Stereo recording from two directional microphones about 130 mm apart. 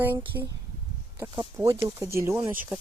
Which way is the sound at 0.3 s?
15° right (ahead or behind).